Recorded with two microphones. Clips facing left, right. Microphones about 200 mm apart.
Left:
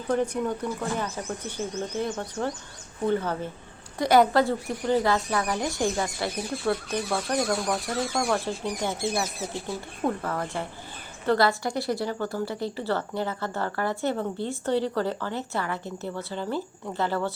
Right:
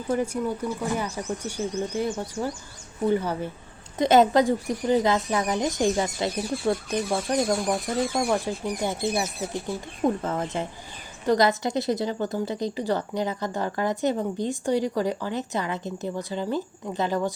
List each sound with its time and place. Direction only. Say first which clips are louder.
0.1 s a woman's voice: even; 10° right (ahead or behind)